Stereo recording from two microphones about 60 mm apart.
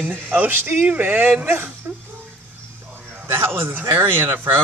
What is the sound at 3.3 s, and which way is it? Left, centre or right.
Speech, right.